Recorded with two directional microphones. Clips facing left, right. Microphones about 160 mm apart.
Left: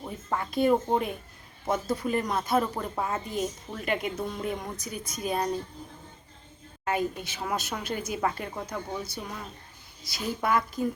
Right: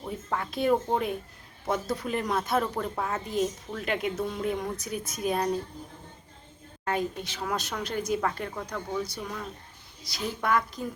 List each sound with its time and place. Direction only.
0.0 s a woman's voice: 5° left (ahead or behind)
6.8 s a woman's voice: 5° left (ahead or behind)